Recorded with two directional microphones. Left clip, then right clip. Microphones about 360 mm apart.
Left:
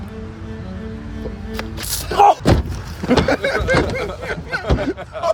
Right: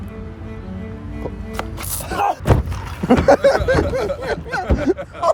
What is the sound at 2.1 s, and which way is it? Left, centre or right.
Speech, centre.